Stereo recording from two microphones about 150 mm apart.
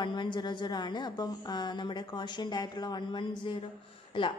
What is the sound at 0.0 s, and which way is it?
A woman's voice, 30° left (ahead or behind).